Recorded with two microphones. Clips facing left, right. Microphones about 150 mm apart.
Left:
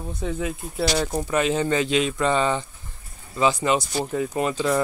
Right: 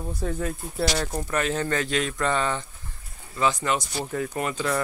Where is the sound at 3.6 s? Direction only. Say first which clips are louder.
Left 4 dB; 25° left (ahead or behind).